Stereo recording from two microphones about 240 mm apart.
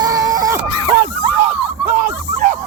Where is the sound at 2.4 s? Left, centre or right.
Right.